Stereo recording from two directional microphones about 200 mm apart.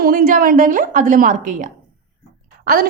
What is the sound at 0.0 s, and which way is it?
A woman's voice, 45° right (ahead or behind).